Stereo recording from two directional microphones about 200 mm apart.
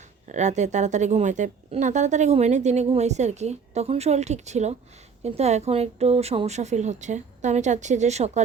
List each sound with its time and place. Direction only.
0.3 s a woman's voice: 35° right (ahead or behind)